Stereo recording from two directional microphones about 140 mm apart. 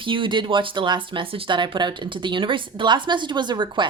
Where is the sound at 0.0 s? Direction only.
35° right (ahead or behind).